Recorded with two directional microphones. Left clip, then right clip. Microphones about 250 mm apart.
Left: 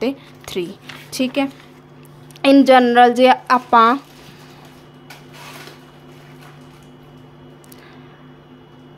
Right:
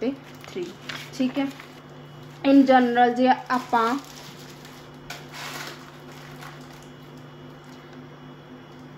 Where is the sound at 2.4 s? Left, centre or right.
Left.